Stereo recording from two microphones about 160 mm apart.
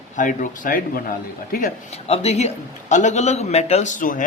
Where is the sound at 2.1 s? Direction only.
40° left (ahead or behind).